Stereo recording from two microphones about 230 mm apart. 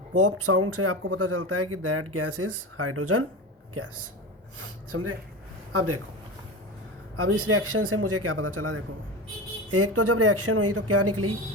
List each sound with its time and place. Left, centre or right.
0.1 s speech: right
4.6 s speech: right
7.2 s speech: right